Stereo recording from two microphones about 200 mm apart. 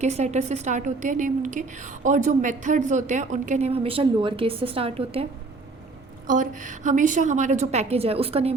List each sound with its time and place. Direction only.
0.0 s a woman's voice: 35° right (ahead or behind)
6.2 s a woman's voice: 40° right (ahead or behind)